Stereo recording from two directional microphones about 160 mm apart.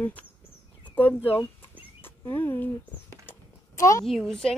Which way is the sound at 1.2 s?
10° left (ahead or behind).